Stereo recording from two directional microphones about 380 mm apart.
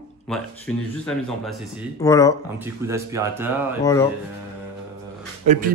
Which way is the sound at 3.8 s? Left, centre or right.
Centre.